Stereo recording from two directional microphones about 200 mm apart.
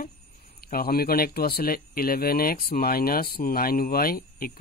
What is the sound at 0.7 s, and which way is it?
Speech, 50° left (ahead or behind).